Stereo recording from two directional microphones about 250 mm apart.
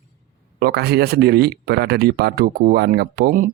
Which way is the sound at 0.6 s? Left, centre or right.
Right.